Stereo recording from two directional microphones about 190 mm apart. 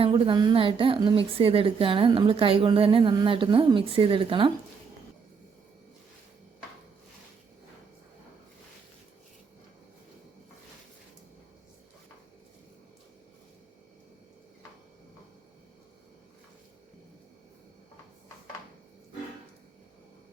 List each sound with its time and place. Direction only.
0.0 s a woman's voice: 25° right (ahead or behind)